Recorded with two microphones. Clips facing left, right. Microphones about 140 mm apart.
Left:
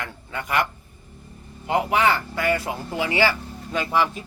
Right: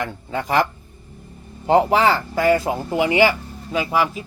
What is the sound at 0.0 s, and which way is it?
Speech, 30° right (ahead or behind).